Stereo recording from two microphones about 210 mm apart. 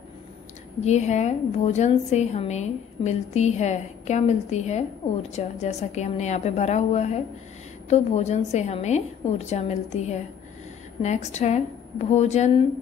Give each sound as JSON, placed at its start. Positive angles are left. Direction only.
{"t": 0.7, "sound": "a woman's voice", "side_deg": 35}